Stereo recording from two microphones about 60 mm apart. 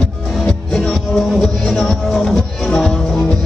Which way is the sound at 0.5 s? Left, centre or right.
Centre.